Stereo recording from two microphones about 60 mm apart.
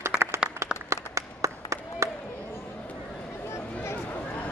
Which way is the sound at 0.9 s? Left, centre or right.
Right.